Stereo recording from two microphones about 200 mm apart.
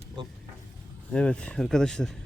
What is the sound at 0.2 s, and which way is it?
Speech, 20° right (ahead or behind).